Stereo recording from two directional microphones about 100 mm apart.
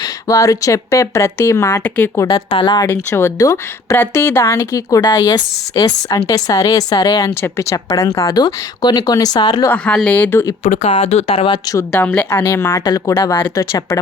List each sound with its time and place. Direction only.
0.0 s speech: 35° left (ahead or behind)
2.1 s speech: 40° left (ahead or behind)
2.9 s speech: 25° left (ahead or behind)
7.3 s speech: 25° left (ahead or behind); by 9.6 s 45° left (ahead or behind)
9.6 s a woman's voice: 10° left (ahead or behind)
10.8 s speech: 90° left
11.9 s a woman's voice: 15° left (ahead or behind)
12.8 s speech: 35° left (ahead or behind)